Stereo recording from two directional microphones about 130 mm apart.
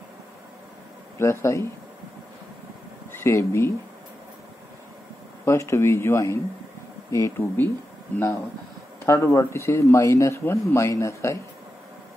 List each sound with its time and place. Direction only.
1.1 s speech: 20° left (ahead or behind)
3.3 s speech: 20° left (ahead or behind)
5.4 s speech: 20° left (ahead or behind)